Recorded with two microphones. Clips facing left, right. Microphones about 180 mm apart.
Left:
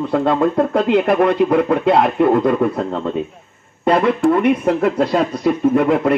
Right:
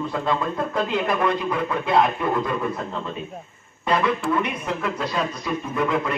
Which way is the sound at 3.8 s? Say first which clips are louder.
Left 8 dB; 60° left (ahead or behind).